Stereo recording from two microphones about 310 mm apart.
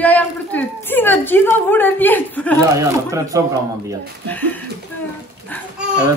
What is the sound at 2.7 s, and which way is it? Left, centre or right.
Speech, centre.